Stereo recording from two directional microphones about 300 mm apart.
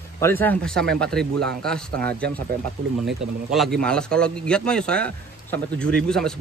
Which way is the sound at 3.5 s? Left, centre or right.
Centre.